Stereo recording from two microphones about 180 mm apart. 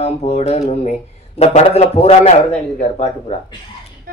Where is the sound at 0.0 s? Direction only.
35° left (ahead or behind).